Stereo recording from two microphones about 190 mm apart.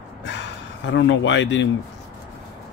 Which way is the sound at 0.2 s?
70° left (ahead or behind).